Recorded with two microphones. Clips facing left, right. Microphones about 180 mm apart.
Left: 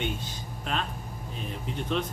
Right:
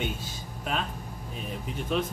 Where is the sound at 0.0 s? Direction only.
5° right (ahead or behind).